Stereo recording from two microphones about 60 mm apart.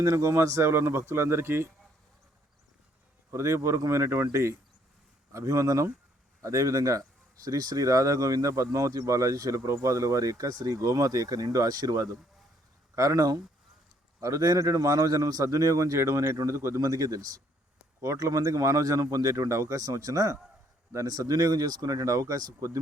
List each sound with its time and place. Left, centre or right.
0.0 s speech: right
0.6 s speech: right
3.3 s speech: right
7.4 s speech: right
14.2 s speech: right
15.4 s speech: right
16.8 s speech: right
18.0 s speech: right
21.1 s speech: right